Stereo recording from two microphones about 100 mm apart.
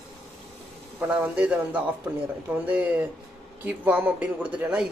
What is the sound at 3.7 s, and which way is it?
Speech, 15° right (ahead or behind).